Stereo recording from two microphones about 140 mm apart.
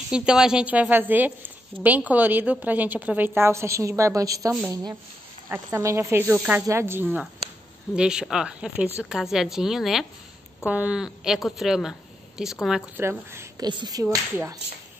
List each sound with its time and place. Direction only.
0.1 s a woman's voice: 5° right (ahead or behind)
12.9 s a woman's voice: 15° right (ahead or behind)
13.7 s speech: 30° right (ahead or behind)
14.0 s speech: 20° right (ahead or behind)